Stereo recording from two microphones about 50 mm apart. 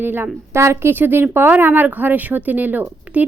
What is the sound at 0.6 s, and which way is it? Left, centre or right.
Speech, right.